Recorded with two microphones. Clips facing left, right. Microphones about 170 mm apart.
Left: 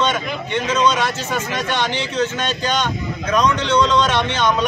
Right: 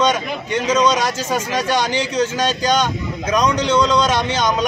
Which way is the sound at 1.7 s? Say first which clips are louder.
Right 2 dB; 10° right (ahead or behind).